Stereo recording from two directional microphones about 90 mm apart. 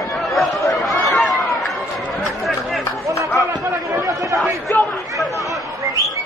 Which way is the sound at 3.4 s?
40° right (ahead or behind).